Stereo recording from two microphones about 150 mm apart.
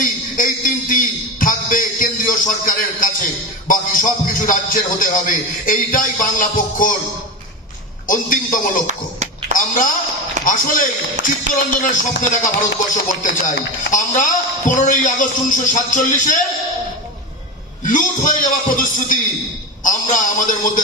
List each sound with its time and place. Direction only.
0.0 s a sound: 60° left (ahead or behind)
8.1 s speech: 65° left (ahead or behind)
10.4 s speech: 65° left (ahead or behind)
17.8 s speech: 60° left (ahead or behind)